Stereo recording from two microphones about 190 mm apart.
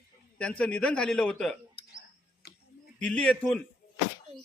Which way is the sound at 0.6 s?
5° left (ahead or behind).